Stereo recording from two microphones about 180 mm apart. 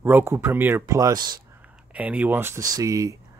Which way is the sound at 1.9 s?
10° right (ahead or behind).